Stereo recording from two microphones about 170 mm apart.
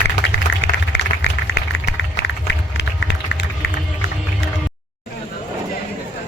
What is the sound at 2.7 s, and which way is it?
Run, 90° left.